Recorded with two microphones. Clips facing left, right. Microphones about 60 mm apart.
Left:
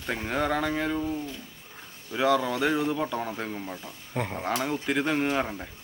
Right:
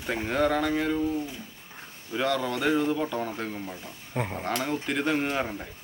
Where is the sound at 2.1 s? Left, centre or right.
Centre.